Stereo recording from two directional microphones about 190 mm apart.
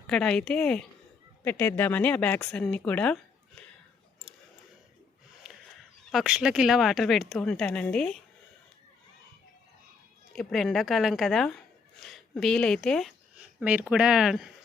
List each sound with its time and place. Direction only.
0.1 s speech: 5° left (ahead or behind)
5.5 s a sound: 5° right (ahead or behind)
6.1 s speech: 5° right (ahead or behind)
10.3 s speech: centre (ahead or behind)